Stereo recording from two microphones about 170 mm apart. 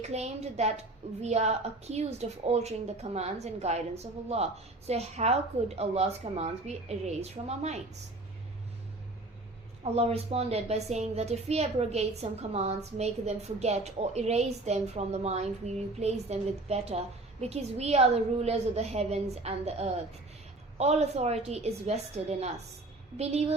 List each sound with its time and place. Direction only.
0.0 s a woman's voice: 40° right (ahead or behind)
9.8 s a woman's voice: 35° right (ahead or behind)